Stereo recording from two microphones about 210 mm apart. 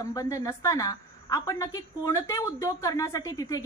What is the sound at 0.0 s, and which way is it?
A woman's voice, 15° left (ahead or behind).